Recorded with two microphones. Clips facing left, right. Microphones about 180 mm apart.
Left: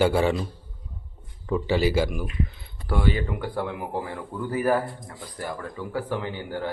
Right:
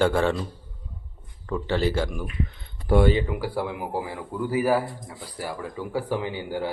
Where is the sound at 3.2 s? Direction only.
5° right (ahead or behind).